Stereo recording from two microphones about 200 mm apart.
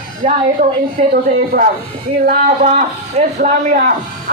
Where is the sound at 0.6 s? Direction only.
35° right (ahead or behind).